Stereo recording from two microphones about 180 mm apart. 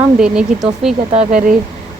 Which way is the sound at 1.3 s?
50° right (ahead or behind).